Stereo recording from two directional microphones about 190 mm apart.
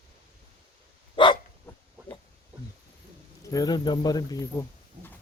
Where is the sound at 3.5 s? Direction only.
20° left (ahead or behind).